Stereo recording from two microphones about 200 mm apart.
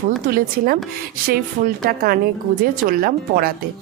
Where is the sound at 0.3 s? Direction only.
45° right (ahead or behind).